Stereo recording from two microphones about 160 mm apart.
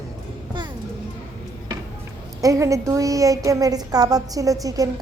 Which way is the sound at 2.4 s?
20° right (ahead or behind).